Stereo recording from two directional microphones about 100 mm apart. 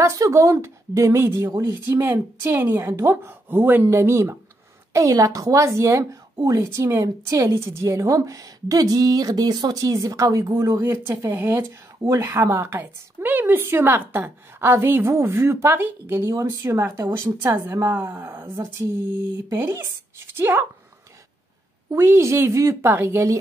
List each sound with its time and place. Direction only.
0.0 s a woman's voice: 30° right (ahead or behind)
10.8 s a woman's voice: 20° right (ahead or behind)
19.5 s a woman's voice: 25° right (ahead or behind)
21.9 s a woman's voice: 25° right (ahead or behind)